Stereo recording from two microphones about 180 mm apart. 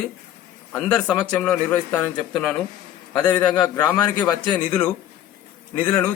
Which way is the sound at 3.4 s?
25° left (ahead or behind).